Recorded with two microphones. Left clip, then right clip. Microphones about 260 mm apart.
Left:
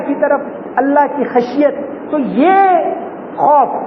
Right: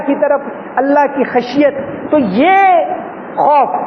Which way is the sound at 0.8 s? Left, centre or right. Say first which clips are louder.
Right 1 dB; right.